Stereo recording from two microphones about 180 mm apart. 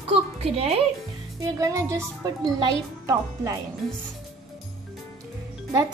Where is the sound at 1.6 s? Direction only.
15° right (ahead or behind).